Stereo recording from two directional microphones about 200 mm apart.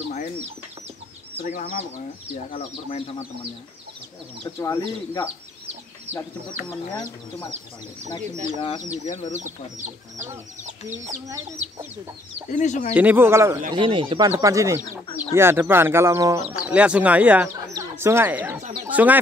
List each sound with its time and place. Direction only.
1.4 s speech: 40° left (ahead or behind)
4.6 s speech: 20° left (ahead or behind)
8.2 s speech: 35° right (ahead or behind)
8.5 s speech: 20° left (ahead or behind)
9.0 s speech: 35° left (ahead or behind)
9.3 s speech: 40° right (ahead or behind)
12.4 s speech: 40° left (ahead or behind)
12.9 s speech: 10° right (ahead or behind)
13.7 s speech: 25° right (ahead or behind); by 19.1 s 10° right (ahead or behind)